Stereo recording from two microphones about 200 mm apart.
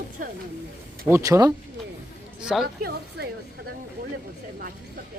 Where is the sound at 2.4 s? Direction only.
5° right (ahead or behind).